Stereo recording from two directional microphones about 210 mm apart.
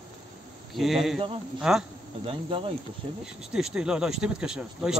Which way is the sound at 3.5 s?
5° right (ahead or behind).